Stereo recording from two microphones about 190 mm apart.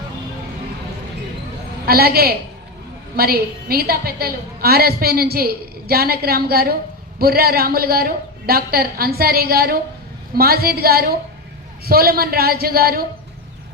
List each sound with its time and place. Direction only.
1.9 s a woman's voice: 55° right (ahead or behind)